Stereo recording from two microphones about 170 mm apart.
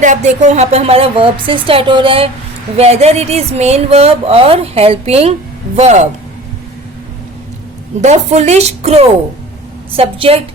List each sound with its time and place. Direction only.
0.0 s speech: 45° right (ahead or behind)
8.0 s speech: 40° right (ahead or behind)